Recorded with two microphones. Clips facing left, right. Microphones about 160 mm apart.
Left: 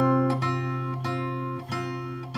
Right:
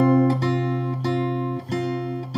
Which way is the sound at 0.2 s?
35° right (ahead or behind).